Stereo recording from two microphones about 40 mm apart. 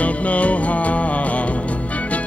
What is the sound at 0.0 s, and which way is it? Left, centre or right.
Music, left.